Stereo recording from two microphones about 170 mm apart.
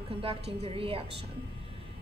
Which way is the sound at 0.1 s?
35° right (ahead or behind).